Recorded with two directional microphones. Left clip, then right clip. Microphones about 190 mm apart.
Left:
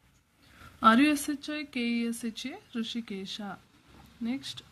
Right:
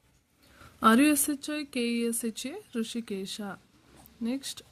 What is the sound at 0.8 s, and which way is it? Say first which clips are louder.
Speech: even; 40° right (ahead or behind).